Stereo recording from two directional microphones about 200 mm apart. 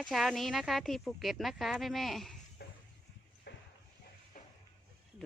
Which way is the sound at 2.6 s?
55° left (ahead or behind).